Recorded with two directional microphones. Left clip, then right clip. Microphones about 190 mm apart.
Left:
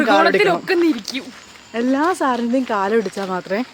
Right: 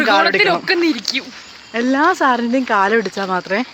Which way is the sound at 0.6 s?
15° left (ahead or behind).